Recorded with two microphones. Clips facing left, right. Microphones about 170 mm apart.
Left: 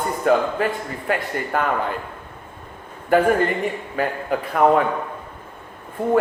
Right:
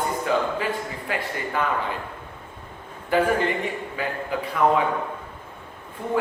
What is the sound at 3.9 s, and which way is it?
Speech, 50° left (ahead or behind).